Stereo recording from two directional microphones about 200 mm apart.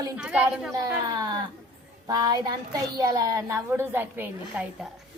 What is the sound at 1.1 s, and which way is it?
A child's voice, 20° right (ahead or behind).